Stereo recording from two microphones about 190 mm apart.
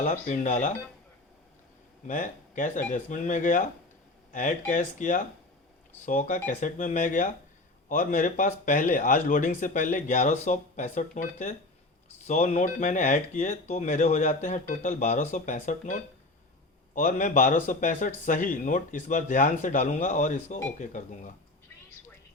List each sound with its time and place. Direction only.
0.0 s speech: 40° left (ahead or behind)
2.0 s speech: 40° left (ahead or behind)